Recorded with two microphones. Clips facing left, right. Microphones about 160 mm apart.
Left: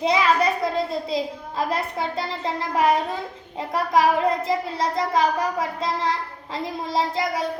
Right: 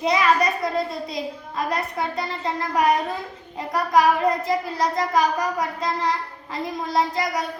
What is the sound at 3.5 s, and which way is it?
A child's voice, 25° left (ahead or behind).